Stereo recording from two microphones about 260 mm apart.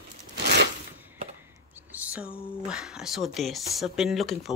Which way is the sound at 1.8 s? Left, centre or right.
Centre.